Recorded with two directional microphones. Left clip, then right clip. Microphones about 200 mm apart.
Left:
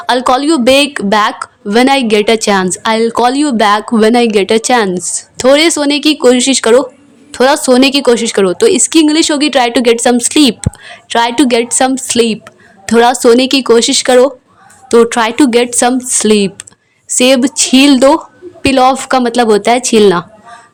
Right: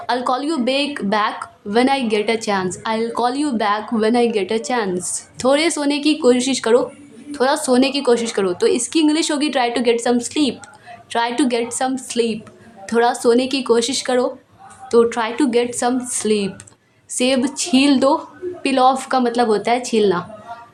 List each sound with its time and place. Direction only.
0.0 s a woman's voice: 35° left (ahead or behind)
4.9 s a woman's voice: 30° left (ahead or behind)